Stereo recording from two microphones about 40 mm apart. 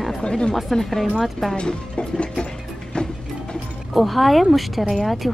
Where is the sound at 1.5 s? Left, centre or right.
Left.